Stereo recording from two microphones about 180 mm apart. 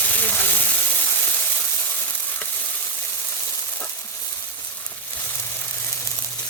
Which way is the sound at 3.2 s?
15° left (ahead or behind).